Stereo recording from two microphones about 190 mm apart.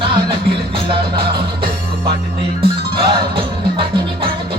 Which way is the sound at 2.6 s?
25° right (ahead or behind).